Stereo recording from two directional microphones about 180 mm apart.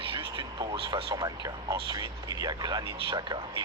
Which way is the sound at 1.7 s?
20° right (ahead or behind).